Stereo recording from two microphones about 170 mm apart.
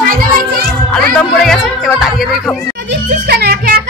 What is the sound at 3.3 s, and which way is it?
Music, 65° right (ahead or behind).